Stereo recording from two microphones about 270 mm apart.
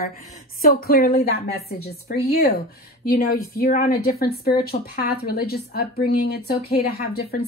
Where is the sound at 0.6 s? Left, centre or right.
Left.